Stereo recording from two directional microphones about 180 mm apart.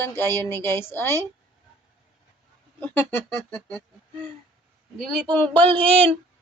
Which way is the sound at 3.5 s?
5° left (ahead or behind).